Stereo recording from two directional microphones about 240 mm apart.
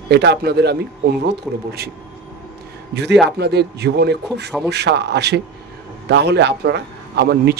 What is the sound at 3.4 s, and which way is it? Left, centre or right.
A man's voice, right.